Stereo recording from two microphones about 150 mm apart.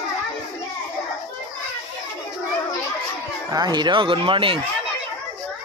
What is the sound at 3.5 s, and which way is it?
Speech, 30° right (ahead or behind).